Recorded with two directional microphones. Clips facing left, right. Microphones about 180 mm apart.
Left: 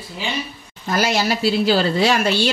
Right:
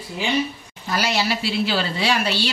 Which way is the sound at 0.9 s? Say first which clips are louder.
Left 3 dB; 45° left (ahead or behind).